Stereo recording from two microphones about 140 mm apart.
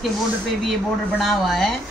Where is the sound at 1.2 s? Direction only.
Centre (ahead or behind).